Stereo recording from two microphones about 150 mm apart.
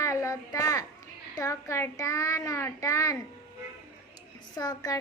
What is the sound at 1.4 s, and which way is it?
Child singing, 20° left (ahead or behind).